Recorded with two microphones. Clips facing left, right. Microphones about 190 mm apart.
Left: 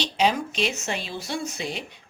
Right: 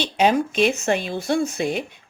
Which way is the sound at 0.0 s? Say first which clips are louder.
Right 5 dB; 55° right (ahead or behind).